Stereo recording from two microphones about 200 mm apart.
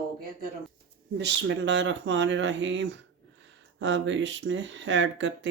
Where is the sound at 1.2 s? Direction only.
65° right (ahead or behind).